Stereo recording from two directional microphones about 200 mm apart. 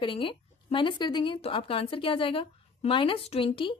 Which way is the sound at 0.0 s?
25° left (ahead or behind).